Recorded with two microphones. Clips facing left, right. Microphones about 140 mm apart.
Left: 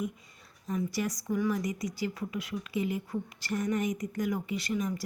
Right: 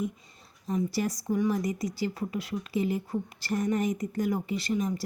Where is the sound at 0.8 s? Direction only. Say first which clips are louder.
Right 3 dB; 30° right (ahead or behind).